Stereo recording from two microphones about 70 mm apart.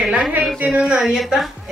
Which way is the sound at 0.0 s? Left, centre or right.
Centre.